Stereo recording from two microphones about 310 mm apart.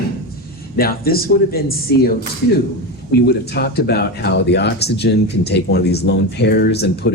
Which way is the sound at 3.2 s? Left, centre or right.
Left.